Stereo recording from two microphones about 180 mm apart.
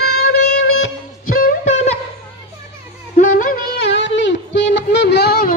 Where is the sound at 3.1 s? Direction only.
50° left (ahead or behind).